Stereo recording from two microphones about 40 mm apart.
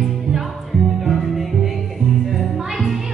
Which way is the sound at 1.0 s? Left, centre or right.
Centre.